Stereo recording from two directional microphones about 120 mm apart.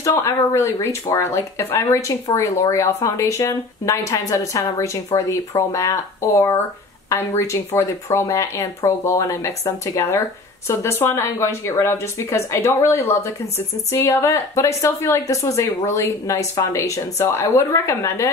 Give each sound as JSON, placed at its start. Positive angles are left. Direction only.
{"t": 0.0, "sound": "speech", "side_deg": 25}